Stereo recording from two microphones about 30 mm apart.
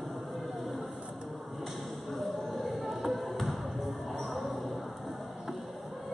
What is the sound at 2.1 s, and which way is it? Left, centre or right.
Basketball bounce, centre.